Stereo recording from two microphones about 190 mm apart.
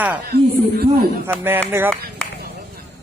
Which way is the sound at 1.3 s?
10° right (ahead or behind).